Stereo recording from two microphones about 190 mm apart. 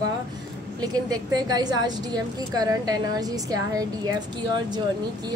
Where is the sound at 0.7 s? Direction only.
20° right (ahead or behind).